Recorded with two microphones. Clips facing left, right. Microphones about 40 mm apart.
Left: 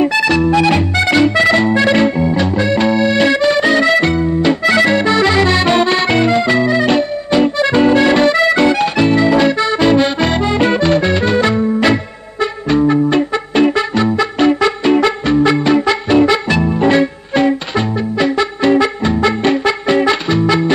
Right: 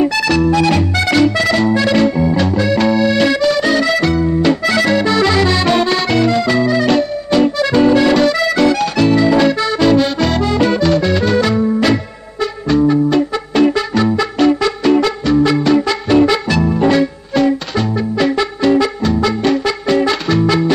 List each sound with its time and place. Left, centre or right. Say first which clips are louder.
0.0 s music: left 1 dB; centre
18.1 s music: left 1 dB; centre
18.6 s music: left 1 dB; left